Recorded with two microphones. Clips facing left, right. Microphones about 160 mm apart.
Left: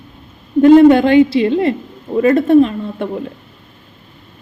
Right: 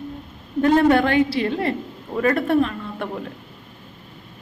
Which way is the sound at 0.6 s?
20° left (ahead or behind).